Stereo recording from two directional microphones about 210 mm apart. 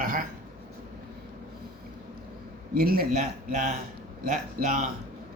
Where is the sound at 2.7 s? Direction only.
45° right (ahead or behind).